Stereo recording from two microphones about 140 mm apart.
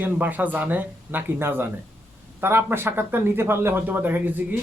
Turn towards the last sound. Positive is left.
turn(degrees=-15)  # may be behind; listen again after turning